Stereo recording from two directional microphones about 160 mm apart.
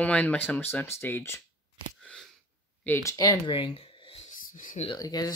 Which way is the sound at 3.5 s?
35° left (ahead or behind).